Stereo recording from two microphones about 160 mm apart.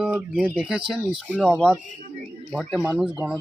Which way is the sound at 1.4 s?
5° left (ahead or behind).